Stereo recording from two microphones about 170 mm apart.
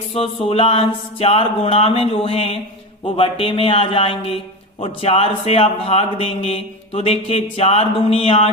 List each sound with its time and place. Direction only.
0.1 s a man's voice: 35° left (ahead or behind)